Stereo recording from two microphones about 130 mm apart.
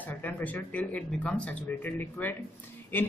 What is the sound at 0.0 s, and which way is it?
A man's voice, 10° left (ahead or behind).